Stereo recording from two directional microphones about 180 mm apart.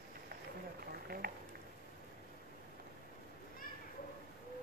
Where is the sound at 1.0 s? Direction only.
60° right (ahead or behind).